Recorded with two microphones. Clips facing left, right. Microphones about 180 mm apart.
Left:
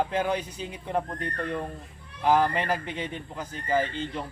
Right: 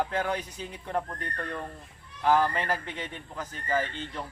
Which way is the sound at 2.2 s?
15° left (ahead or behind).